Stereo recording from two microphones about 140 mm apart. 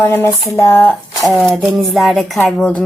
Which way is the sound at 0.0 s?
15° left (ahead or behind).